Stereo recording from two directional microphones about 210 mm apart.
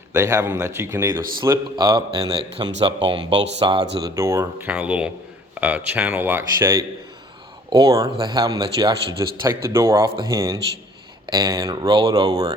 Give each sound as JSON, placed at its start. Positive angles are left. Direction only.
{"t": 0.1, "sound": "speech", "side_deg": -15}